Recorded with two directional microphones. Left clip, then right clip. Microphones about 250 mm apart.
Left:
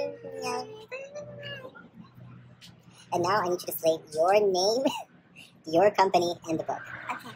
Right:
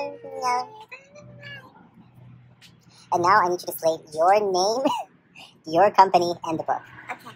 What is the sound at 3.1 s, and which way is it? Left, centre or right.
A woman's voice, centre.